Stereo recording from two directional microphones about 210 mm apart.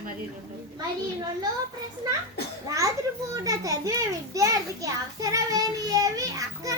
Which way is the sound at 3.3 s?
15° right (ahead or behind).